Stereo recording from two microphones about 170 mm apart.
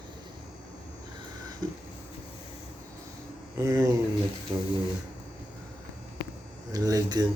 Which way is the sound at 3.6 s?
20° right (ahead or behind).